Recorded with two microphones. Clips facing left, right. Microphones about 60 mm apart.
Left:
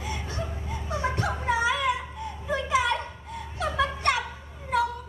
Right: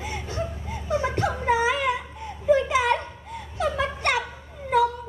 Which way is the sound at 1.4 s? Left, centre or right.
Right.